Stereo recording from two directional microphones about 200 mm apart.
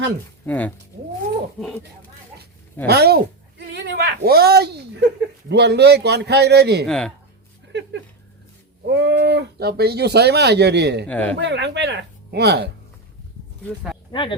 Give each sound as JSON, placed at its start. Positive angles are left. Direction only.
{"t": 0.4, "sound": "speech", "side_deg": 10}
{"t": 2.8, "sound": "a woman's voice", "side_deg": -50}
{"t": 6.8, "sound": "speech", "side_deg": 5}
{"t": 7.7, "sound": "speech", "side_deg": -60}
{"t": 11.1, "sound": "speech", "side_deg": 5}
{"t": 11.3, "sound": "speech", "side_deg": -60}
{"t": 14.1, "sound": "speech", "side_deg": 25}